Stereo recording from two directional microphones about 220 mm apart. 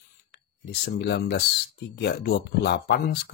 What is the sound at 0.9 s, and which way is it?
Speech, 45° left (ahead or behind).